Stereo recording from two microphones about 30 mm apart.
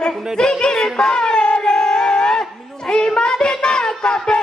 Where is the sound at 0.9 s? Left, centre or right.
Left.